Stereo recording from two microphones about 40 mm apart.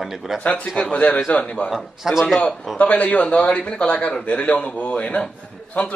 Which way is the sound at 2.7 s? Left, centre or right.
Left.